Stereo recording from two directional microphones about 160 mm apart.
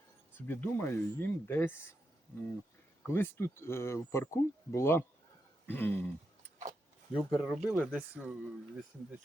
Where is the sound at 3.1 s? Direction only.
15° left (ahead or behind).